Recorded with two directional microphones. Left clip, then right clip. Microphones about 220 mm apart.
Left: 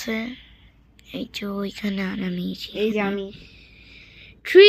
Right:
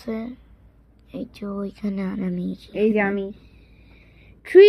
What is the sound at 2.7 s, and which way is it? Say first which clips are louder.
Speech: right 3 dB; 40° right (ahead or behind).